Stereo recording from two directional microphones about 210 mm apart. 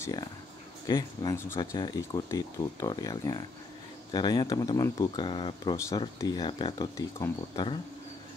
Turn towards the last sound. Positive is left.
turn(degrees=20)  # may be behind; listen again after turning